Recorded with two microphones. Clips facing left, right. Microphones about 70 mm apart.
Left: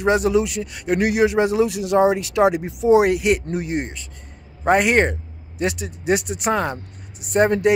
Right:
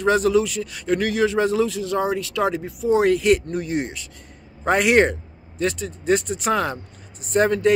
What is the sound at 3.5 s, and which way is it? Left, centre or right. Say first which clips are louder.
Speech: even; left.